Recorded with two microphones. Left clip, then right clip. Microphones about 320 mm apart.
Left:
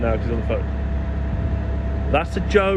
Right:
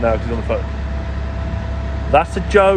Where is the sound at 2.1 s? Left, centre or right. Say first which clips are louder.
Right 7 dB; centre.